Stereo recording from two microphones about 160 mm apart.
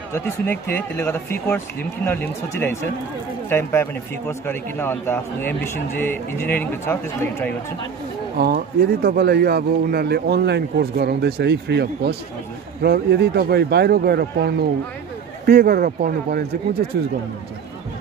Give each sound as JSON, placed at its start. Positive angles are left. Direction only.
{"t": 0.1, "sound": "speech", "side_deg": 15}
{"t": 8.4, "sound": "speech", "side_deg": -80}
{"t": 15.4, "sound": "speech", "side_deg": -75}